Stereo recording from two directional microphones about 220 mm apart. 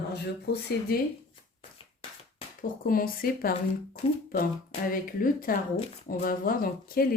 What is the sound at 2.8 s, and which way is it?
A woman's voice, 40° left (ahead or behind).